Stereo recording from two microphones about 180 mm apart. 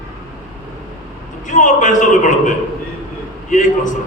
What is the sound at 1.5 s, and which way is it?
A man's voice, 45° left (ahead or behind).